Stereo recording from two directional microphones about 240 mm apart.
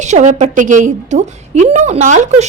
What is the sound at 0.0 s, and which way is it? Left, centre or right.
A woman's voice, right.